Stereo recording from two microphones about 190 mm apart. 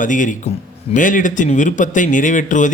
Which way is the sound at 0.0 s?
40° left (ahead or behind).